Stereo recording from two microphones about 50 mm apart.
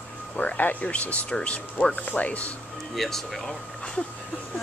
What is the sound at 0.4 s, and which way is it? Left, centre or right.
Speech, left.